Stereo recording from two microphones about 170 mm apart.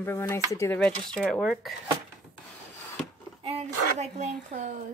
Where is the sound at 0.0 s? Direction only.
15° left (ahead or behind).